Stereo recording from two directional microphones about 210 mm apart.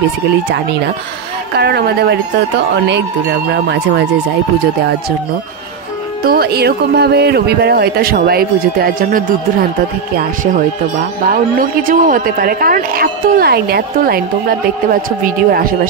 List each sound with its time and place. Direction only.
1.6 s speech: 50° right (ahead or behind)
6.2 s speech: 45° right (ahead or behind)